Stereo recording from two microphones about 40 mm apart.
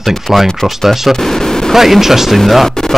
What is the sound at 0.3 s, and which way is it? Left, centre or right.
Speech, centre.